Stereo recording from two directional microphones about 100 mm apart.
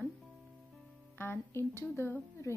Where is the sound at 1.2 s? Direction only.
20° left (ahead or behind).